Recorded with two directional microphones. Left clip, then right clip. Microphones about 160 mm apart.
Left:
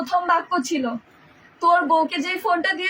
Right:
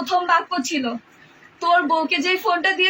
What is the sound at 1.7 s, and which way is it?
A woman's voice, 15° left (ahead or behind).